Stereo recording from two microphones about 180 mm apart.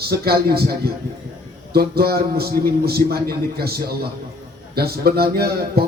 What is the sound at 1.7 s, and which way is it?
A man's voice, 60° right (ahead or behind).